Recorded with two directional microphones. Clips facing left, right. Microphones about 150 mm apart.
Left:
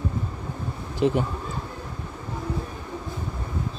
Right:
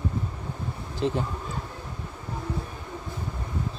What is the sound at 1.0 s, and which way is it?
Speech, 15° left (ahead or behind).